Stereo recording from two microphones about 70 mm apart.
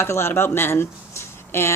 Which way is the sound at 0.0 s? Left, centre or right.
Left.